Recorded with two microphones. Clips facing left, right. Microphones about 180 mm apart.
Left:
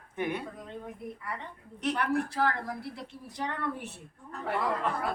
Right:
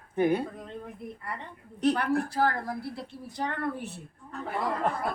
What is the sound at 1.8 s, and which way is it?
A woman's voice, 35° right (ahead or behind).